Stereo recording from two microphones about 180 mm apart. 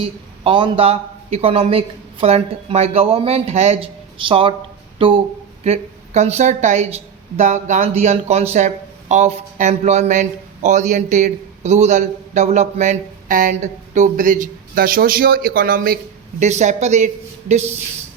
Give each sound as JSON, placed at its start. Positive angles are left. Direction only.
{"t": 0.0, "sound": "speech", "side_deg": -30}
{"t": 16.4, "sound": "speech", "side_deg": -40}